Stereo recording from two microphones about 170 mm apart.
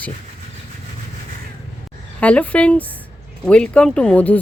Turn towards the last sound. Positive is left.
turn(degrees=10)  # may be behind; listen again after turning